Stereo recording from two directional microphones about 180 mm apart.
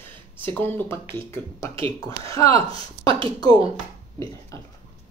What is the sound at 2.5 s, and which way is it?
Speech, 30° right (ahead or behind).